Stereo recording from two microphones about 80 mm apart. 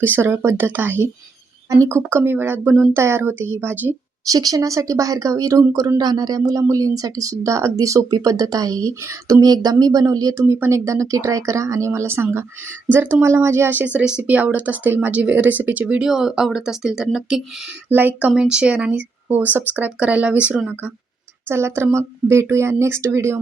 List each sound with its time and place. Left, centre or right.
0.0 s speech: right
4.3 s speech: right
6.0 s speech: right
10.3 s speech: right; by 16.0 s centre
16.0 s speech: centre
17.8 s speech: right
18.3 s speech: centre
21.5 s speech: right